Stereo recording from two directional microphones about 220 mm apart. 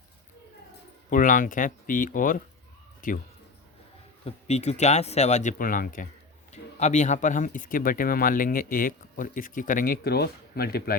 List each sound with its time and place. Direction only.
1.1 s speech: 35° left (ahead or behind)
4.3 s speech: 30° left (ahead or behind)